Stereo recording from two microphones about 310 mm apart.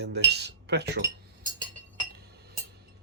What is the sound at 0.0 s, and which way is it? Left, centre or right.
Speech, right.